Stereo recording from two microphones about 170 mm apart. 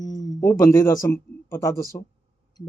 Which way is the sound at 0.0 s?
20° left (ahead or behind).